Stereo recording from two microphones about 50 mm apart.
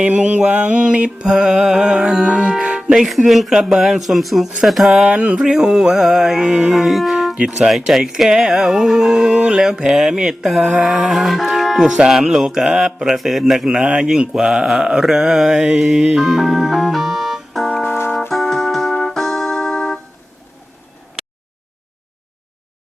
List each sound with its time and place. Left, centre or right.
0.3 s music: right
3.2 s speech: centre
5.0 s music: right
5.4 s speech: centre
6.7 s music: centre
7.7 s speech: centre
9.3 s music: right
9.6 s speech: centre
13.7 s speech: centre
16.1 s music: centre
17.8 s brass instrument: left
18.3 s keyboard: centre